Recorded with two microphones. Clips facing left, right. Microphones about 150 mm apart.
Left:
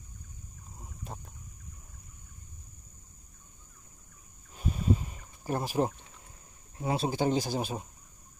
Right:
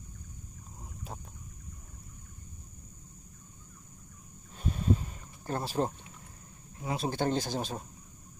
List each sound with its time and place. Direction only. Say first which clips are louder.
0.7 s boat: even; centre (ahead or behind)
4.6 s a sound: left 1 dB; 10° left (ahead or behind)
6.8 s speech: left 4 dB; 30° left (ahead or behind)
7.1 s speech: even; 10° left (ahead or behind)